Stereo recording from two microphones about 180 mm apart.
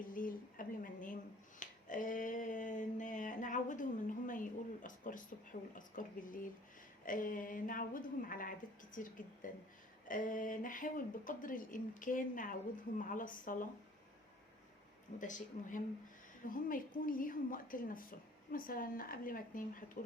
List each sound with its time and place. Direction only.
0.1 s finger snapping: 50° left (ahead or behind)
5.7 s speech: 50° left (ahead or behind)
15.2 s speech: 45° left (ahead or behind)